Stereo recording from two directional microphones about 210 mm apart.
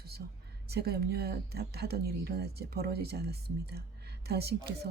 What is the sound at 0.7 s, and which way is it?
Speech, 50° right (ahead or behind).